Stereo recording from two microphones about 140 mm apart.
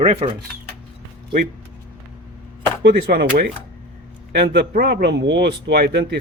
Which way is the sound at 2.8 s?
90° right.